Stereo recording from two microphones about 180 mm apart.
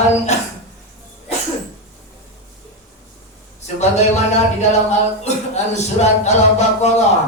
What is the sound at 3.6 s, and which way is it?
Speech, 40° left (ahead or behind).